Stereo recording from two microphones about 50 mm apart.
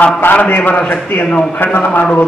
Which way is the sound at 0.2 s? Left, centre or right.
Left.